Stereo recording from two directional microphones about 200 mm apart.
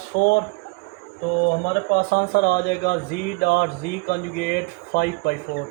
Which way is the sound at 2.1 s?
55° left (ahead or behind).